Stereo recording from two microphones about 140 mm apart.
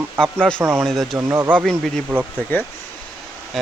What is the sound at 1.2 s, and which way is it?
Speech, 15° right (ahead or behind).